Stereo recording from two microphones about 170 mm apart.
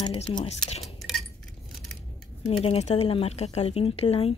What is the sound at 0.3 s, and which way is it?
Speech, 35° left (ahead or behind).